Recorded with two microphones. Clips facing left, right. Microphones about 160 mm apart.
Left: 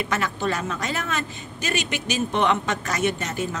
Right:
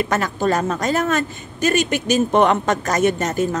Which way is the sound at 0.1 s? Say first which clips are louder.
Right 6 dB; 40° right (ahead or behind).